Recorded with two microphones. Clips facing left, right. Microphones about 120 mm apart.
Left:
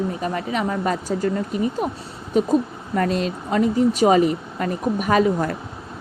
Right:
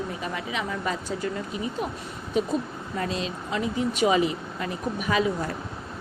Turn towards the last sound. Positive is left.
turn(degrees=50)  # may be behind; listen again after turning